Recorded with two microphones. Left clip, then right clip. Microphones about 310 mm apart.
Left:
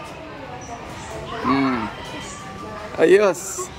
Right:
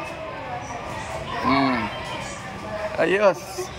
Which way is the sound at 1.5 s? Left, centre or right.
Centre.